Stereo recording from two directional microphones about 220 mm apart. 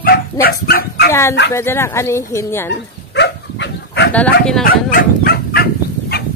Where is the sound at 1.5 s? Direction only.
10° left (ahead or behind).